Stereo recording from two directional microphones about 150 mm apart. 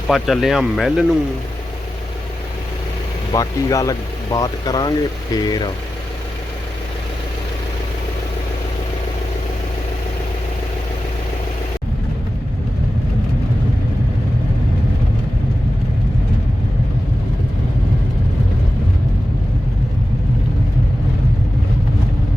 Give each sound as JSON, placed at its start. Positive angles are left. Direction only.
{"t": 0.1, "sound": "speech", "side_deg": 0}
{"t": 3.3, "sound": "speech", "side_deg": 20}